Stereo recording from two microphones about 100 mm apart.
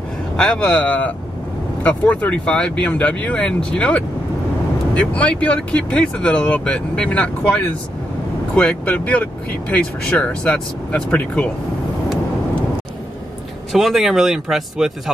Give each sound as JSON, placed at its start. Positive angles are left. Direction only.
{"t": 0.4, "sound": "speech", "side_deg": 10}
{"t": 13.7, "sound": "speech", "side_deg": 0}